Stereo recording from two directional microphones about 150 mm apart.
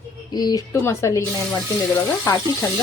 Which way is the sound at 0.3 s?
25° left (ahead or behind).